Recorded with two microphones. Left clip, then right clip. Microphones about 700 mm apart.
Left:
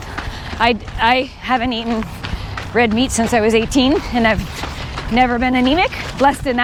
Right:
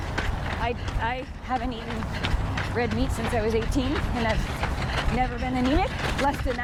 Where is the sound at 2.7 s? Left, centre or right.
Left.